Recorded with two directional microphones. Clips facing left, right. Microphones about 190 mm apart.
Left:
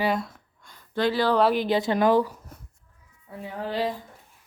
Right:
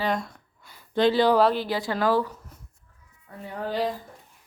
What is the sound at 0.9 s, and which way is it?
Speech, 20° right (ahead or behind).